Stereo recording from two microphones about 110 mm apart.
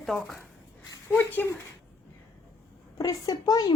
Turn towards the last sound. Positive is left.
turn(degrees=35)  # may be behind; listen again after turning